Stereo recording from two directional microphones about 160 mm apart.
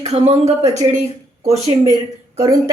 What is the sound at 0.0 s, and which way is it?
Speech, 40° right (ahead or behind).